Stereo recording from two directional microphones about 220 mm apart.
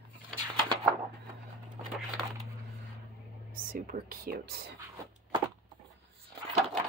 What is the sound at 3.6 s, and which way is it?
Speech, 40° right (ahead or behind).